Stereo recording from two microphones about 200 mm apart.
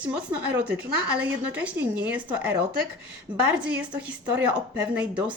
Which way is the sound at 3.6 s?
5° right (ahead or behind).